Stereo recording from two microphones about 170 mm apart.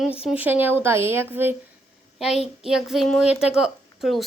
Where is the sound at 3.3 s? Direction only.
5° right (ahead or behind).